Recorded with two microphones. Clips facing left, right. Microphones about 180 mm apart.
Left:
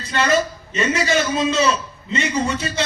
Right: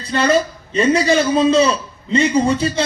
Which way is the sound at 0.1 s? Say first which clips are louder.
Right 3 dB; 35° right (ahead or behind).